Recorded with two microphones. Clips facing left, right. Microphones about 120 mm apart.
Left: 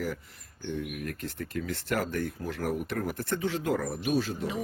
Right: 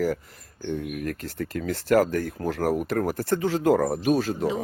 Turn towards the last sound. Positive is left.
turn(degrees=-45)  # may be behind; listen again after turning